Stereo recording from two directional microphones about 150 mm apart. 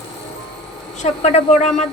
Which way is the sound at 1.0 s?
45° left (ahead or behind).